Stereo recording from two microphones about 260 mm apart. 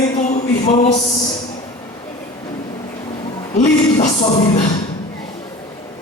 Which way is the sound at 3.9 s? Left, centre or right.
Left.